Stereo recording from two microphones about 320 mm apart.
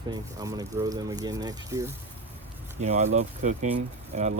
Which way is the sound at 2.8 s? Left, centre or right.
Right.